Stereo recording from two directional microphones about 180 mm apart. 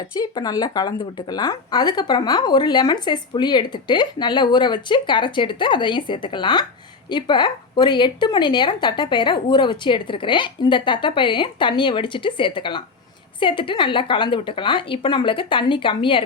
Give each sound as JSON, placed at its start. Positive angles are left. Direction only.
{"t": 0.2, "sound": "speech", "side_deg": 20}